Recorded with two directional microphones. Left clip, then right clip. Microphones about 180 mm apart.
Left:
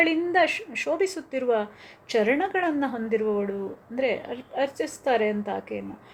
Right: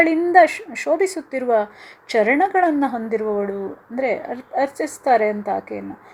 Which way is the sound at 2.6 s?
30° right (ahead or behind).